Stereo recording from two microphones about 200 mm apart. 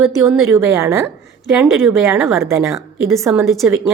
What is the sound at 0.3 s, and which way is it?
A woman's voice, 15° right (ahead or behind).